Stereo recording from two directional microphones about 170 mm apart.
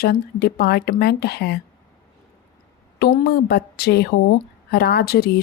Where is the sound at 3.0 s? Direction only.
65° left (ahead or behind).